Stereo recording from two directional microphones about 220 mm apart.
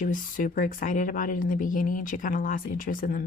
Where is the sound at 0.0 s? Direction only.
35° left (ahead or behind).